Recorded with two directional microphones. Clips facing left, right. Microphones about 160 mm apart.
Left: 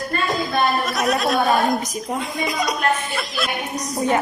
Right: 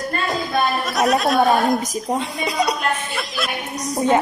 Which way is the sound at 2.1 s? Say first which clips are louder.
Right 1 dB; 30° right (ahead or behind).